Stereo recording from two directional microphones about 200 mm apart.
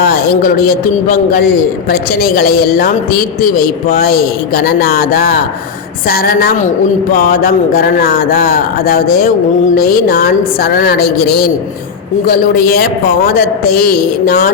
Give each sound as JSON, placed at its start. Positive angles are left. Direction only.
{"t": 0.0, "sound": "a man's voice", "side_deg": 50}